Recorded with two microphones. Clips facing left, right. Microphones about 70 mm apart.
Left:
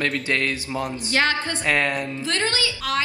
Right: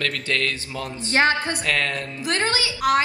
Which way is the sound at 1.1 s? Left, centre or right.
Right.